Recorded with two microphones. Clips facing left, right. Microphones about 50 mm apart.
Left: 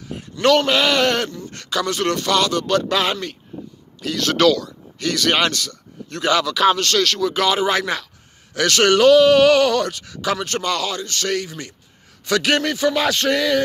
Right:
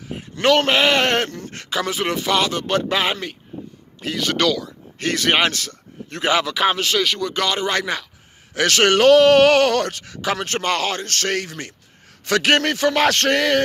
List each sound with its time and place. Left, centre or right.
0.1 s a sound: right
0.6 s speech: right
1.5 s speech: right
4.2 s a man's voice: centre
4.9 s speech: right; by 8.1 s centre
8.5 s speech: right